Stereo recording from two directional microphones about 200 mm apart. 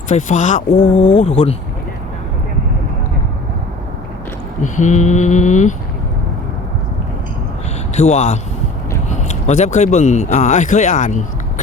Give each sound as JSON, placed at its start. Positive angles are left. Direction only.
{"t": 0.1, "sound": "speech", "side_deg": 35}
{"t": 4.6, "sound": "speech", "side_deg": 35}
{"t": 7.9, "sound": "speech", "side_deg": 35}